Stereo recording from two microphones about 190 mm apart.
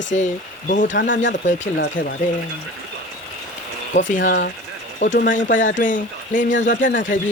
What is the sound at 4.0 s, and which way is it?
Speech, 40° left (ahead or behind).